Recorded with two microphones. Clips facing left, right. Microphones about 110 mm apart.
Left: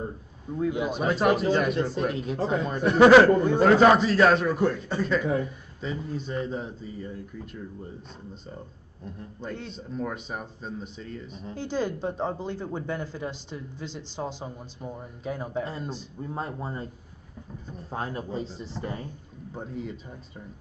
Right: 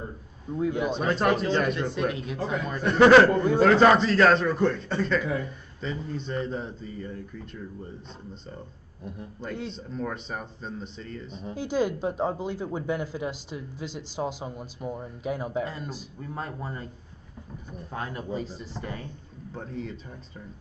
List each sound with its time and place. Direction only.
0.7 s a man's voice: 10° left (ahead or behind)
2.0 s speech: 35° left (ahead or behind)
2.8 s a man's voice: 5° left (ahead or behind)
9.8 s a man's voice: 5° left (ahead or behind)
11.4 s speech: 10° right (ahead or behind)
15.6 s speech: 25° left (ahead or behind)
17.8 s speech: 30° left (ahead or behind)
19.5 s a man's voice: 10° left (ahead or behind)